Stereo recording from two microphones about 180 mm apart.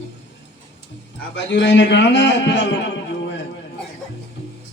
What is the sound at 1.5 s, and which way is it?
A man's voice, 80° left.